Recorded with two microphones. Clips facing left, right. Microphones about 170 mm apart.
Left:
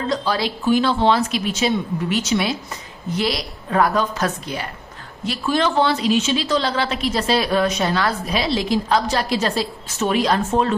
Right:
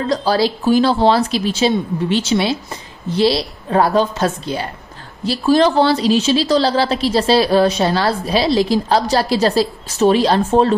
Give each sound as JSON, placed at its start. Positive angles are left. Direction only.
{"t": 0.1, "sound": "a woman's voice", "side_deg": -35}